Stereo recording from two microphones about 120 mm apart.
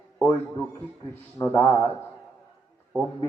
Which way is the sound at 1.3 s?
15° left (ahead or behind).